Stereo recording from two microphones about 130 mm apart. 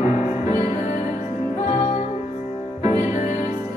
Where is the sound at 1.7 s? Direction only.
60° left (ahead or behind).